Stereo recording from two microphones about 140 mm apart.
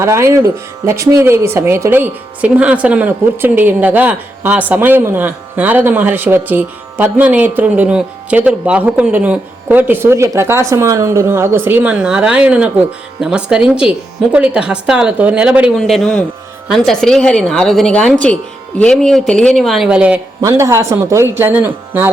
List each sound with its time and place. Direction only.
0.0 s a woman's voice: 20° right (ahead or behind)
15.7 s a woman's voice: centre (ahead or behind)
20.4 s a woman's voice: 20° right (ahead or behind)